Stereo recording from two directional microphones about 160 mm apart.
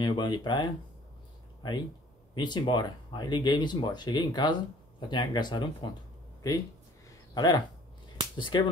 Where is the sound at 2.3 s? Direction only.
30° left (ahead or behind).